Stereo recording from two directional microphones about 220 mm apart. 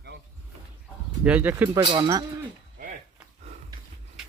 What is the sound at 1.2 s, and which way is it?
Speech, 5° right (ahead or behind).